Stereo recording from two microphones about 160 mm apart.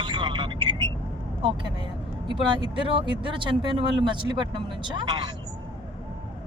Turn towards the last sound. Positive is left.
turn(degrees=-25)  # may be behind; listen again after turning